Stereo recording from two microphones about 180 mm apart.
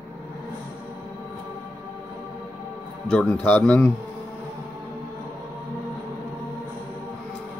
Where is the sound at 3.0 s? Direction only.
5° left (ahead or behind).